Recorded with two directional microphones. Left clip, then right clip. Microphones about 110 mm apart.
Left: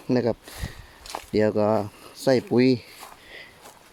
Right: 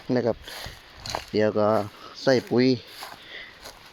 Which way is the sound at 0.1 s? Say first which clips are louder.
Left 1 dB; 60° left (ahead or behind).